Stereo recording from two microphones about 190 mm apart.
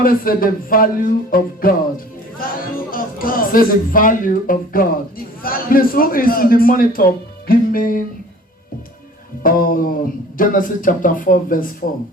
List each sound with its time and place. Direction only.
0.0 s speech: 50° left (ahead or behind)
2.9 s speech: 50° left (ahead or behind)
9.4 s speech: 50° left (ahead or behind)